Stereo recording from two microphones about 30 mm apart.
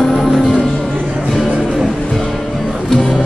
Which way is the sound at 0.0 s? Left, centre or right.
Centre.